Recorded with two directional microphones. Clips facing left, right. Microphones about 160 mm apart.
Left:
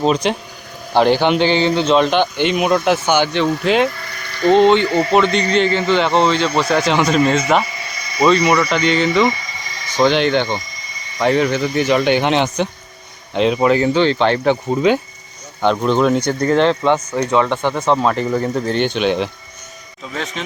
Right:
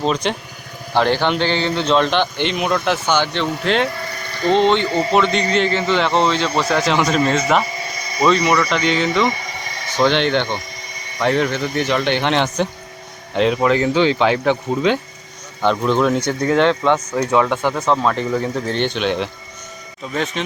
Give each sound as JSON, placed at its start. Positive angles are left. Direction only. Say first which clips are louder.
{"t": 0.0, "sound": "speech", "louder": "left 3 dB", "side_deg": 5}
{"t": 4.4, "sound": "speech", "louder": "left 4 dB", "side_deg": 40}
{"t": 5.1, "sound": "speech", "louder": "left 2 dB", "side_deg": 0}
{"t": 9.4, "sound": "a sound", "louder": "right 3 dB", "side_deg": -60}
{"t": 10.0, "sound": "speech", "louder": "left 2 dB", "side_deg": 0}
{"t": 10.6, "sound": "a sound", "louder": "right 2 dB", "side_deg": -60}
{"t": 11.2, "sound": "speech", "louder": "left 3 dB", "side_deg": 0}